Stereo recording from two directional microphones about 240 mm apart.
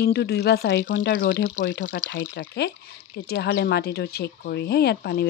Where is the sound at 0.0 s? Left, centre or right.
Left.